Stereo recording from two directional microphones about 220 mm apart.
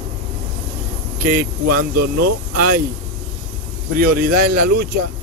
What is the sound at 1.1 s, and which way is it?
Vehicle, 40° right (ahead or behind).